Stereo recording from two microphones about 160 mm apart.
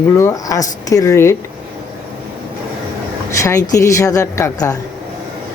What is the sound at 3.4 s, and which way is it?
Speech, 20° left (ahead or behind).